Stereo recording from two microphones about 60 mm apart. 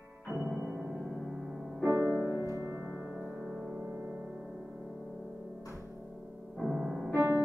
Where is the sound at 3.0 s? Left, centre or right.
Right.